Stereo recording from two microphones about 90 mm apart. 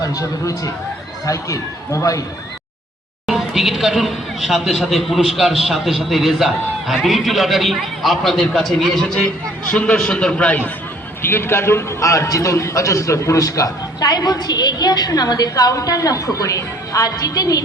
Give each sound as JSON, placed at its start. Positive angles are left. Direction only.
{"t": 0.0, "sound": "a man's voice", "side_deg": 40}
{"t": 3.2, "sound": "a man's voice", "side_deg": -5}
{"t": 11.2, "sound": "a man's voice", "side_deg": 25}